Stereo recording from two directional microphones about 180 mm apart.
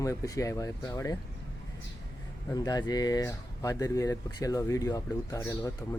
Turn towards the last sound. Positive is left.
turn(degrees=20)  # may be behind; listen again after turning